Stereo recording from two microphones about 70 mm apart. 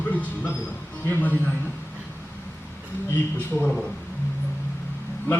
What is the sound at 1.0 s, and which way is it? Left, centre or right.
Speech, left.